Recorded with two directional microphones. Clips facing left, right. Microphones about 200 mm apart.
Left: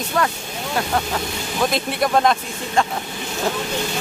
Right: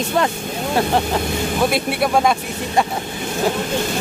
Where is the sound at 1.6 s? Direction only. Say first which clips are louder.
Even; 5° right (ahead or behind).